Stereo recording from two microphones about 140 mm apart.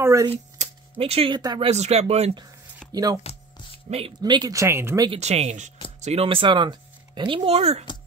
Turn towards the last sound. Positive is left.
turn(degrees=-45)  # may be behind; listen again after turning